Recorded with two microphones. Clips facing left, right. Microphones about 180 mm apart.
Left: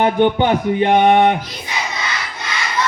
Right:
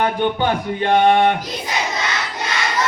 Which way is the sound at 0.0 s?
20° left (ahead or behind).